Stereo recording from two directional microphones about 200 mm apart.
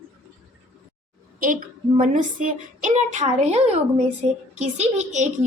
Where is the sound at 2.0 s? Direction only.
40° right (ahead or behind).